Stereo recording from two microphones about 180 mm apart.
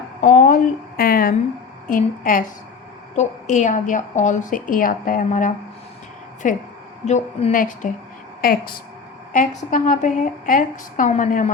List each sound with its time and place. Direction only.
0.2 s a woman's voice: 45° left (ahead or behind)
9.3 s a woman's voice: 45° left (ahead or behind)